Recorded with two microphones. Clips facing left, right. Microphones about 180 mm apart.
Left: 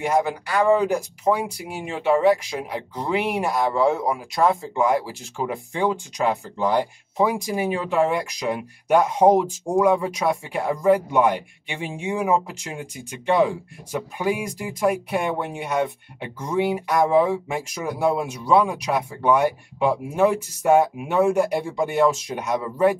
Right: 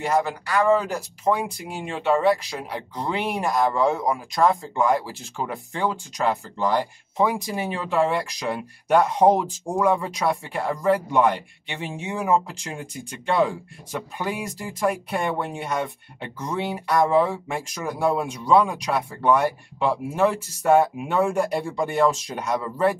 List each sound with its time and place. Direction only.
0.0 s speech: 10° left (ahead or behind)